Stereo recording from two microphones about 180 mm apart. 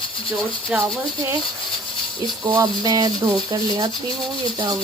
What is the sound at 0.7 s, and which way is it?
Speech, 5° right (ahead or behind).